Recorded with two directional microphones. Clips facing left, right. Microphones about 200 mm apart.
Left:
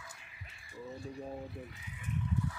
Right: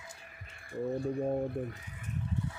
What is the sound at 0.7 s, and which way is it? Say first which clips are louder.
Speech: right 11 dB; 55° right (ahead or behind).